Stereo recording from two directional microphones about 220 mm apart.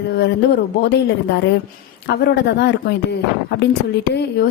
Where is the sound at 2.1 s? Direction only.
50° left (ahead or behind).